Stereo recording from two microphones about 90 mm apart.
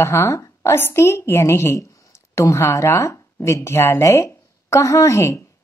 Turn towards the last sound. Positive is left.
turn(degrees=35)  # may be behind; listen again after turning